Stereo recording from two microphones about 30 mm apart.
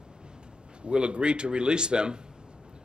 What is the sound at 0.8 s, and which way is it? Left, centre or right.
Speech, right.